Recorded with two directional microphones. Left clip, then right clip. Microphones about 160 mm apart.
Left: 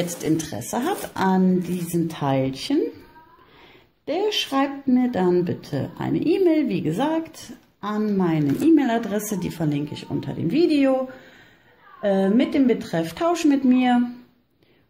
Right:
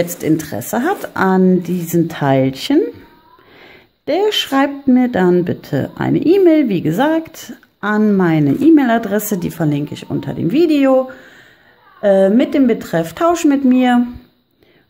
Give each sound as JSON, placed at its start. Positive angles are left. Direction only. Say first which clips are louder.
{"t": 0.0, "sound": "speech", "louder": "right 7 dB", "side_deg": -30}
{"t": 12.0, "sound": "speech", "louder": "right 9 dB", "side_deg": -30}